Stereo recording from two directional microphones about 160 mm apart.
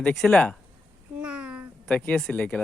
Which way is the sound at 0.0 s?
5° left (ahead or behind).